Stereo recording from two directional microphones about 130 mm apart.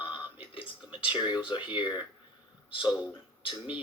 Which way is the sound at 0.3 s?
45° left (ahead or behind).